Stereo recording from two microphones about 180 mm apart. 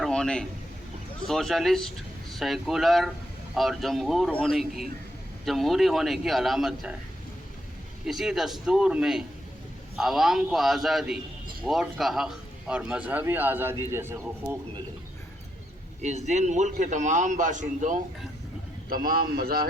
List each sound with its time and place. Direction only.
0.0 s a sound: 5° left (ahead or behind)
1.3 s a man's voice: centre (ahead or behind)
8.0 s a man's voice: centre (ahead or behind)
16.0 s a man's voice: 40° right (ahead or behind)
18.9 s speech: 55° right (ahead or behind)